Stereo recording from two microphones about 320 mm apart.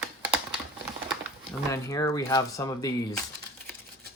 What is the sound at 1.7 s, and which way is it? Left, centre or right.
Speech, centre.